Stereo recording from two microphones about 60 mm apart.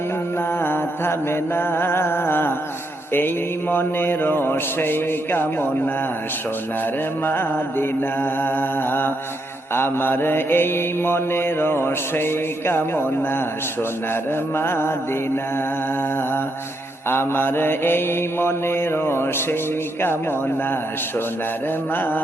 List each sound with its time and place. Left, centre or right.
0.6 s mantra: left
7.3 s mantra: left
14.5 s mantra: left
17.1 s mantra: left